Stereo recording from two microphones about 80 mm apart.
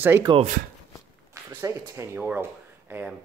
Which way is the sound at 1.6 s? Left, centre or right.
Right.